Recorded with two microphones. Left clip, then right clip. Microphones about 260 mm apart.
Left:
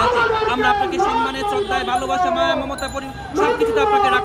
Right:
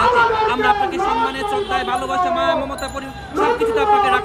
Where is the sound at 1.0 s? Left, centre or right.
Right.